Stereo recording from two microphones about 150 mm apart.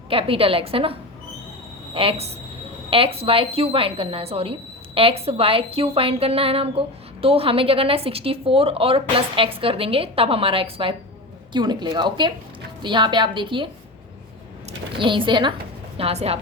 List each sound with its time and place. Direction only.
0.1 s a woman's voice: 40° right (ahead or behind)
14.9 s a woman's voice: 35° right (ahead or behind)